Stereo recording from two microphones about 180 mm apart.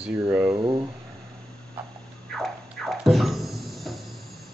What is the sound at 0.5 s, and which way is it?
Speech, 30° right (ahead or behind).